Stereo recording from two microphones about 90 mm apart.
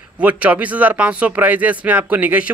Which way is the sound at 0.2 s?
15° right (ahead or behind).